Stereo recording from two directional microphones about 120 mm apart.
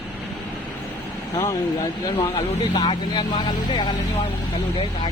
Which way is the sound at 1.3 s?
30° left (ahead or behind).